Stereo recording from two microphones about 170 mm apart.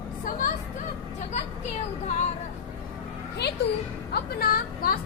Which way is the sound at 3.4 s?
75° left (ahead or behind).